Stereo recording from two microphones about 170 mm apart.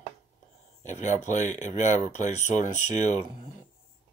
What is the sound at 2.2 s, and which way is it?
Speech, 45° left (ahead or behind).